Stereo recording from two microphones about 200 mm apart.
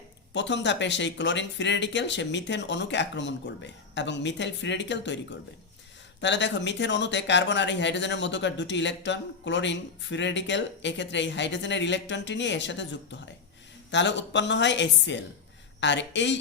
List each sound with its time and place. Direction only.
0.3 s speech: 60° left (ahead or behind)